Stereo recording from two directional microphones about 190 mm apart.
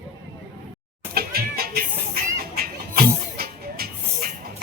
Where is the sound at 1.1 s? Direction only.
50° right (ahead or behind).